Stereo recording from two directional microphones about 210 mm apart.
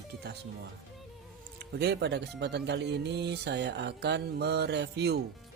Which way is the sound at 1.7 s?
50° right (ahead or behind).